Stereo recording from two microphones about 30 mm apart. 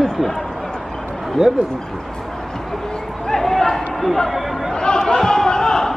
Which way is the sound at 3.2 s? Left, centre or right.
Centre.